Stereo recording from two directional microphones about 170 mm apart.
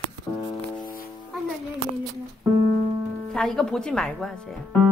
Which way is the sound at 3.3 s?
5° left (ahead or behind).